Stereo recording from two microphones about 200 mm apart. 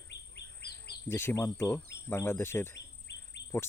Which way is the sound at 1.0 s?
10° left (ahead or behind).